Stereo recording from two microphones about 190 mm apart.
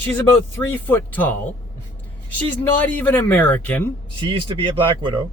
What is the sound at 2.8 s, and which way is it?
Speech, 10° left (ahead or behind).